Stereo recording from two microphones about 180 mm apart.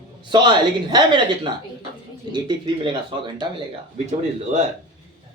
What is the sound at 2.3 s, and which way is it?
Speech, 25° right (ahead or behind).